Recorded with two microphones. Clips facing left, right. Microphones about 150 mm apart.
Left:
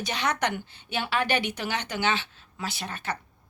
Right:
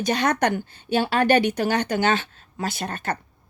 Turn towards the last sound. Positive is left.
turn(degrees=-50)  # may be behind; listen again after turning